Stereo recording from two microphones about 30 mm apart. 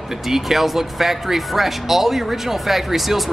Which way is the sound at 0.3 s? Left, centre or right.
Centre.